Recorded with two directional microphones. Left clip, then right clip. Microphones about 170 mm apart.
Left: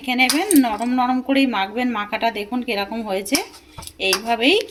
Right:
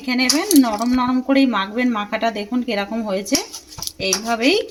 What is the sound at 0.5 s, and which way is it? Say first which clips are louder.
Speech: right 1 dB; 20° right (ahead or behind).